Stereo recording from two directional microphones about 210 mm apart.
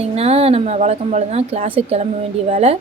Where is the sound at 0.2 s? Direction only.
30° right (ahead or behind).